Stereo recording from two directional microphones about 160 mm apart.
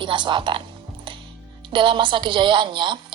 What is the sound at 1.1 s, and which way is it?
Music, 30° right (ahead or behind).